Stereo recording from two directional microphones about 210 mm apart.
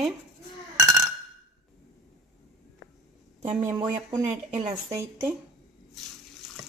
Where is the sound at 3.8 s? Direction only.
30° right (ahead or behind).